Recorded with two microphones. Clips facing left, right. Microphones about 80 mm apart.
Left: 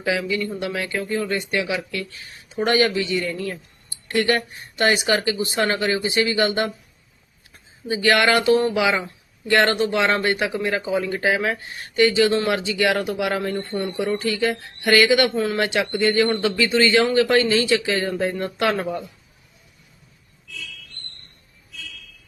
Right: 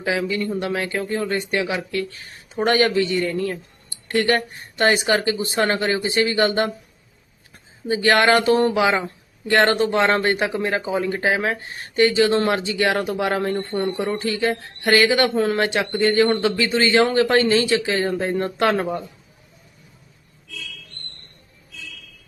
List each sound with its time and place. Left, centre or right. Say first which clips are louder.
0.0 s speech: right 1 dB; right
7.9 s speech: right 2 dB; right